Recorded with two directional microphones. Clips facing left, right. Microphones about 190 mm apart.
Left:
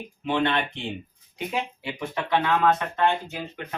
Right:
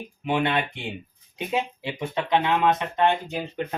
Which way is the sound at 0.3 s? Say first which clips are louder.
Even; 15° right (ahead or behind).